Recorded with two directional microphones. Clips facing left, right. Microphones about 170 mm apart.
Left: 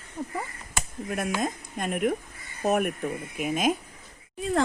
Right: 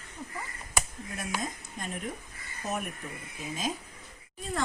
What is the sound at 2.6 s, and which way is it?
A woman's voice, 65° left (ahead or behind).